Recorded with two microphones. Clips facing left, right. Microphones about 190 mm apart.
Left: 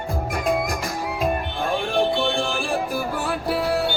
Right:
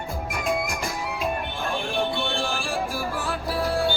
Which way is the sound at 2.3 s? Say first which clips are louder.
Left 4 dB; 60° left (ahead or behind).